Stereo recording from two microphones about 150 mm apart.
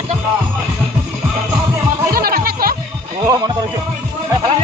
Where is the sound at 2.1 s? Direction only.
85° right.